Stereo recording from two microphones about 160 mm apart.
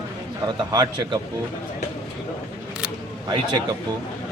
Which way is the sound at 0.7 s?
25° right (ahead or behind).